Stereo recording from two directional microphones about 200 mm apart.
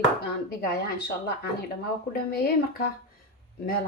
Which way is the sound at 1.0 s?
55° left (ahead or behind).